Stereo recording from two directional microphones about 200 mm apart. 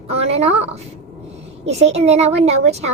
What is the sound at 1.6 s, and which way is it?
A child's voice, 30° right (ahead or behind).